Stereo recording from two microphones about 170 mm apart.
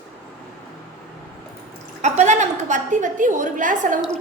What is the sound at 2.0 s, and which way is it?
A woman's voice, 45° right (ahead or behind).